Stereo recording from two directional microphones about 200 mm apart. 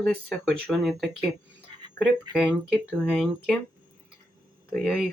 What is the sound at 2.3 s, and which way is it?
Speech, centre (ahead or behind).